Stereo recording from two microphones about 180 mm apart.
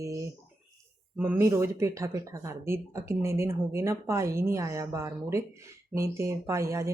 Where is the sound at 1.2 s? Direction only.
15° right (ahead or behind).